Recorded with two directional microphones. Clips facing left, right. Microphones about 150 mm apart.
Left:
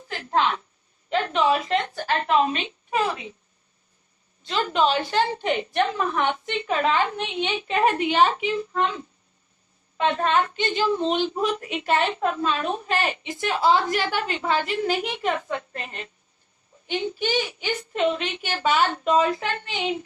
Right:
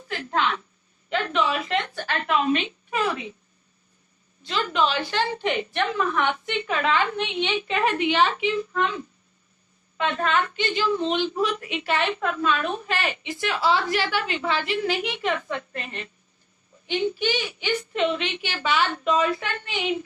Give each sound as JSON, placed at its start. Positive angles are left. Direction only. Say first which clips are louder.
{"t": 0.1, "sound": "a sound", "louder": "left 2 dB", "side_deg": 40}
{"t": 4.4, "sound": "a woman's voice", "louder": "left 2 dB", "side_deg": 40}
{"t": 10.0, "sound": "a woman's voice", "louder": "left 2 dB", "side_deg": 35}